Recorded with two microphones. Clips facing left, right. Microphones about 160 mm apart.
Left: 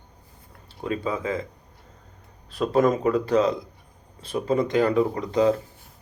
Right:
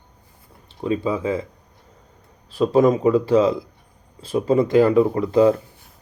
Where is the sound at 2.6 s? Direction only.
25° right (ahead or behind).